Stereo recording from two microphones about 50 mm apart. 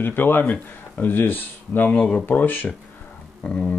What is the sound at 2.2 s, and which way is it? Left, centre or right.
Speech, left.